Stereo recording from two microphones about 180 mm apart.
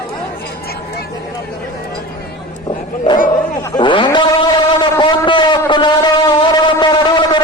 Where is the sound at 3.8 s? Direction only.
25° left (ahead or behind).